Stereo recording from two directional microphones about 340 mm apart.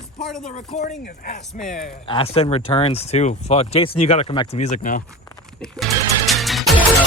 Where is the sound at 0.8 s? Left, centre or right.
Left.